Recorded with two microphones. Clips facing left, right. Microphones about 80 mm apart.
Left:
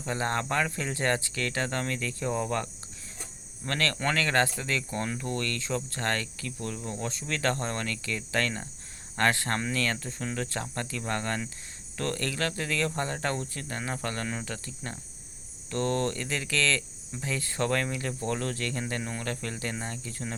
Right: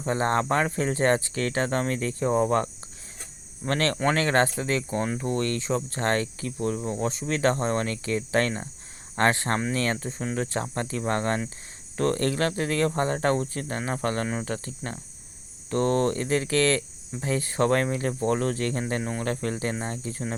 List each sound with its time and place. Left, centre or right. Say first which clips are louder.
0.0 s speech: right 6 dB; right
3.7 s speech: right 5 dB; right